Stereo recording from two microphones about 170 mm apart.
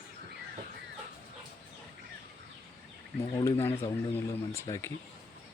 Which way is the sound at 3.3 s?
15° left (ahead or behind).